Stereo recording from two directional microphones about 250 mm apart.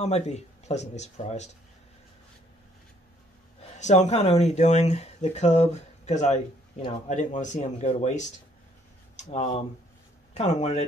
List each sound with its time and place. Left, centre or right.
0.0 s speech: left
3.7 s speech: left